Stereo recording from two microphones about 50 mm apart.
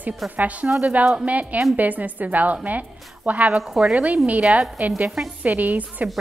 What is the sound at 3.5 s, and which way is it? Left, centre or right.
Speech, centre.